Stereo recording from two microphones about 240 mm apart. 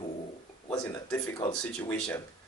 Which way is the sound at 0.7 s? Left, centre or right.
Centre.